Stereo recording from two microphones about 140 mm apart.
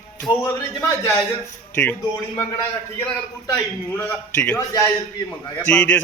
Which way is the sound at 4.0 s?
10° left (ahead or behind).